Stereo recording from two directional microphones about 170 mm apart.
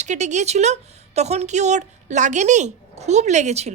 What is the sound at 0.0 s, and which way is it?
Speech, 45° right (ahead or behind).